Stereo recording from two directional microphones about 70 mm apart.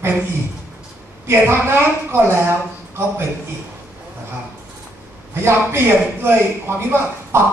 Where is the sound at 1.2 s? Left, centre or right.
Right.